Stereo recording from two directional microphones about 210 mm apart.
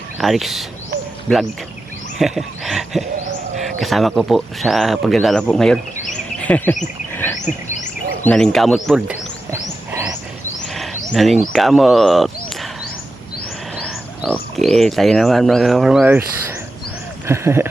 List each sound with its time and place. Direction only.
0.2 s speech: centre (ahead or behind)
2.1 s speech: centre (ahead or behind)
6.4 s bird: 5° left (ahead or behind)
7.4 s a sound: 35° left (ahead or behind)
8.2 s wild animals: 5° left (ahead or behind)
10.8 s speech: centre (ahead or behind)
13.7 s speech: 5° left (ahead or behind)
17.2 s speech: 10° right (ahead or behind)